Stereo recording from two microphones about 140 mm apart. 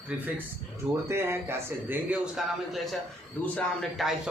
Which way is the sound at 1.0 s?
20° right (ahead or behind).